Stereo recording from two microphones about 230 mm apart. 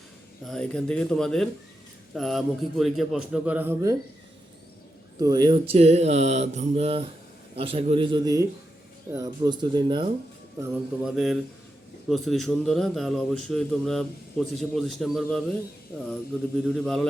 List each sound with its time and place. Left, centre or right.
0.4 s a man's voice: centre
5.2 s speech: centre
10.6 s a man's voice: centre
16.6 s a man's voice: centre